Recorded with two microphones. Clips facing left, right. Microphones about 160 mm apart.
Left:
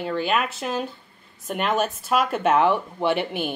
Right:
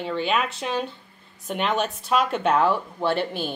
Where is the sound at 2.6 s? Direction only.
15° left (ahead or behind).